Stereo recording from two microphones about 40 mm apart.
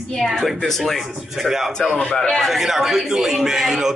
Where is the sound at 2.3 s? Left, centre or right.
Centre.